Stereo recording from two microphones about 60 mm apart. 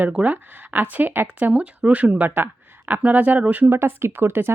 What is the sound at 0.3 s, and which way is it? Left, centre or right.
Speech, right.